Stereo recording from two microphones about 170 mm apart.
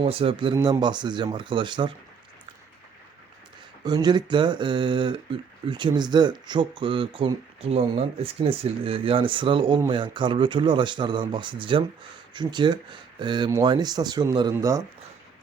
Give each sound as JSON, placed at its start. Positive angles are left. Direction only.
{"t": 0.0, "sound": "speech", "side_deg": -35}
{"t": 3.8, "sound": "speech", "side_deg": -25}